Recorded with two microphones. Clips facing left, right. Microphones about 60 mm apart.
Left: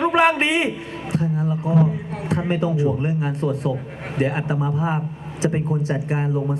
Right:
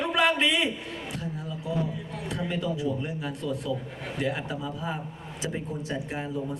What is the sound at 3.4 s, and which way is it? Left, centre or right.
A man's voice, left.